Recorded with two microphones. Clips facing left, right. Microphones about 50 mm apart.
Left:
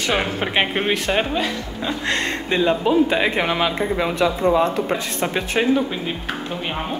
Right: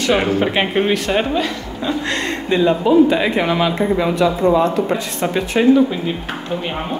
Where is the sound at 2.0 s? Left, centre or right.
Left.